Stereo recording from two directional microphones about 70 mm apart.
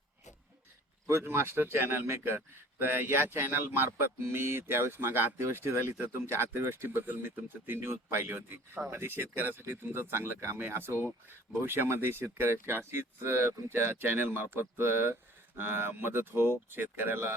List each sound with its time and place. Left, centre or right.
1.0 s speech: right